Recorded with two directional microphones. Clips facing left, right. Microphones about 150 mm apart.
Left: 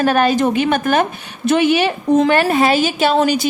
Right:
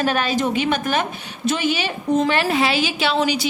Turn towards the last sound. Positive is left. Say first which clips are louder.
# left 5 dB
turn(degrees=50)  # may be behind; listen again after turning